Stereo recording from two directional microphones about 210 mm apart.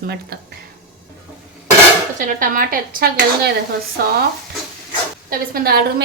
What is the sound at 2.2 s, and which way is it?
A woman's voice, 40° right (ahead or behind).